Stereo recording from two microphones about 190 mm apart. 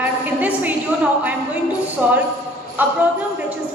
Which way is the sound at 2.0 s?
10° right (ahead or behind).